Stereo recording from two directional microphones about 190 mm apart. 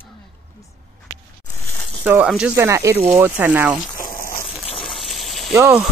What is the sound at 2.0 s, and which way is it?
Speech, 5° right (ahead or behind).